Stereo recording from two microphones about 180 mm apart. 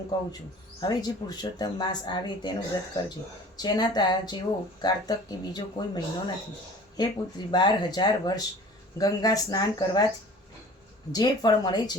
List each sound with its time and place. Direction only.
0.1 s speech: 25° left (ahead or behind)
11.1 s speech: 25° left (ahead or behind)